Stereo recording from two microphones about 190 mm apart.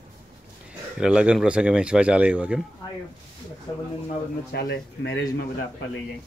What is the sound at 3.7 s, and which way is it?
Speech, 25° left (ahead or behind).